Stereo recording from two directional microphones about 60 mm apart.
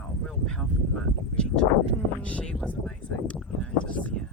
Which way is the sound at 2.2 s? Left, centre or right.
Centre.